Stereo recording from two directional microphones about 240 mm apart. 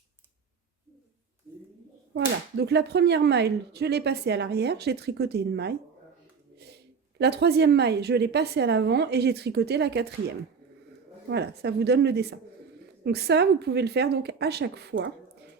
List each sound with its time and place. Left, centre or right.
2.1 s speech: right
7.2 s speech: right